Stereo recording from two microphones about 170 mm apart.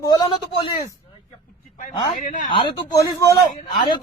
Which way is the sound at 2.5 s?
30° left (ahead or behind).